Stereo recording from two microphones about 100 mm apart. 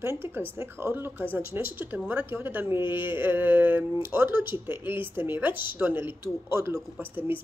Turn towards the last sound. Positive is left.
turn(degrees=-20)  # may be behind; listen again after turning